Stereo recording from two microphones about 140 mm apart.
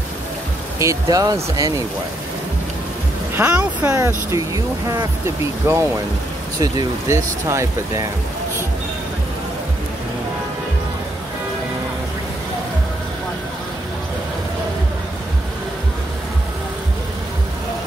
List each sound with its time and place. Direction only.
0.7 s speech: 25° right (ahead or behind)
3.3 s speech: 15° right (ahead or behind)